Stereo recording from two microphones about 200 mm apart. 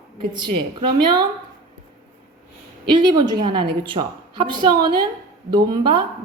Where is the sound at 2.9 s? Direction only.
20° right (ahead or behind).